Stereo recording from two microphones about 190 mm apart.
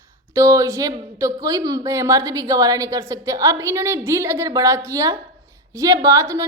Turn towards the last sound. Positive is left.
turn(degrees=-15)  # may be behind; listen again after turning